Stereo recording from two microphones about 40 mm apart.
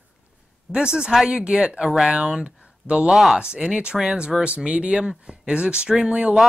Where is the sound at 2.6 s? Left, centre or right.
Right.